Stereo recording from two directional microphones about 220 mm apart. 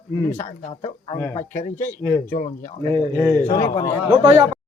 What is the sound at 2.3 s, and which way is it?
Speech, 35° left (ahead or behind).